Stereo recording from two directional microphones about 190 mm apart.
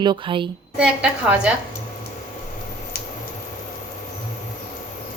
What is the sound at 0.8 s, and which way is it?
Speech, 5° right (ahead or behind).